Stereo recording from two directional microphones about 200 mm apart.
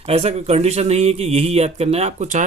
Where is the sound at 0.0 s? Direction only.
30° right (ahead or behind).